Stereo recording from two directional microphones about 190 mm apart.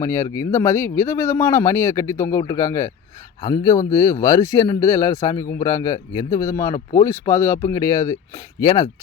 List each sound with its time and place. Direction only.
0.0 s a man's voice: 15° left (ahead or behind)